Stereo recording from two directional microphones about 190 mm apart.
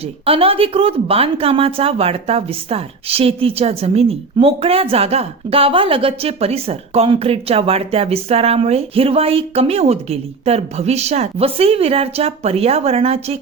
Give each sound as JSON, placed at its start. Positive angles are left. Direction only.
{"t": 0.0, "sound": "speech", "side_deg": -30}